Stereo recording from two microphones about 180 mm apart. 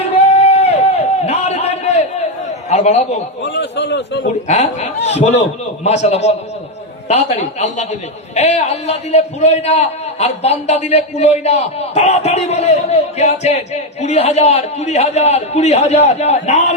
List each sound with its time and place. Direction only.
0.0 s a sound: 35° left (ahead or behind)
2.6 s a man's voice: 35° left (ahead or behind)
3.4 s a man's voice: 75° left (ahead or behind)
4.4 s a man's voice: 40° left (ahead or behind)